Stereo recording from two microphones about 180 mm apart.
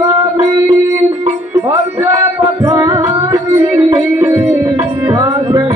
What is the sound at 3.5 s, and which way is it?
Music, 15° right (ahead or behind).